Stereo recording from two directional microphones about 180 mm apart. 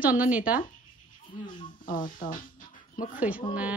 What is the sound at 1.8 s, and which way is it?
Music, 50° left (ahead or behind).